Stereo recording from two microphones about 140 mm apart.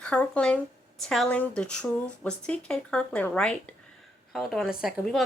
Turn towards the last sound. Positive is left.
turn(degrees=0)  # may be behind; listen again after turning